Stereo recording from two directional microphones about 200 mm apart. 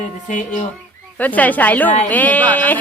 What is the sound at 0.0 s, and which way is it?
Speech, 40° left (ahead or behind).